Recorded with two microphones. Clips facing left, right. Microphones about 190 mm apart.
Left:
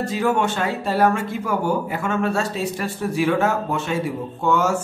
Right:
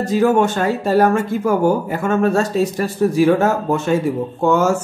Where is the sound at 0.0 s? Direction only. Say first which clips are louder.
Right 6 dB; 40° right (ahead or behind).